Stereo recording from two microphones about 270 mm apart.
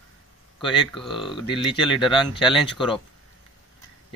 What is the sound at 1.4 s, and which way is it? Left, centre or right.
Speech, centre.